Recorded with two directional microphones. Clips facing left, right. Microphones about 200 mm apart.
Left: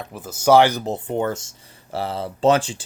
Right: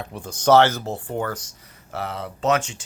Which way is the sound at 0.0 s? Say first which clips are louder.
Left 1 dB; 5° left (ahead or behind).